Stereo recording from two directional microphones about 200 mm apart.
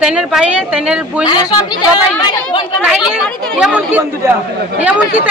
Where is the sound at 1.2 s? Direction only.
20° left (ahead or behind).